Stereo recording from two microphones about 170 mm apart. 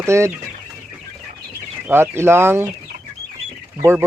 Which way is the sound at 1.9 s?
15° right (ahead or behind).